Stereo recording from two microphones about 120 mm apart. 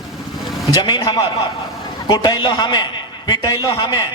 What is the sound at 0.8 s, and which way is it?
A man's voice, 35° left (ahead or behind).